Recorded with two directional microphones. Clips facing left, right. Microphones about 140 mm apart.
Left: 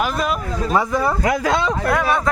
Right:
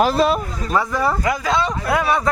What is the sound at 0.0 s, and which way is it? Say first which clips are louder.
Speech: right 5 dB; 30° right (ahead or behind).